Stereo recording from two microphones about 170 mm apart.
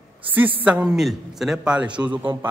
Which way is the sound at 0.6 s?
5° right (ahead or behind).